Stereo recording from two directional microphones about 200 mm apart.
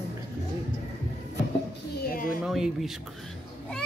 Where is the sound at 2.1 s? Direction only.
45° left (ahead or behind).